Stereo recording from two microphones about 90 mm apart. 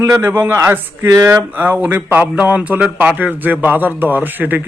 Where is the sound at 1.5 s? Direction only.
20° right (ahead or behind).